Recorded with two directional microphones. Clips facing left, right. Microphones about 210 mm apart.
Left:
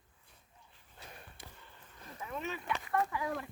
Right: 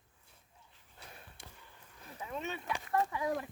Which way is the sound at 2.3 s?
25° right (ahead or behind).